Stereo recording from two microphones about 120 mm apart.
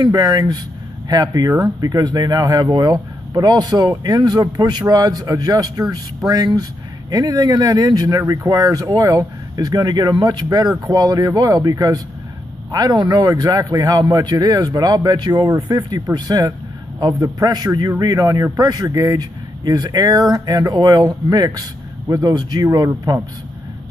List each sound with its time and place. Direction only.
0.0 s speech: 35° right (ahead or behind)